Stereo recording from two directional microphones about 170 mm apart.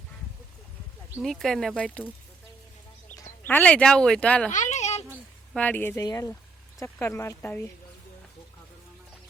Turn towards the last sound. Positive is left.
turn(degrees=15)  # may be behind; listen again after turning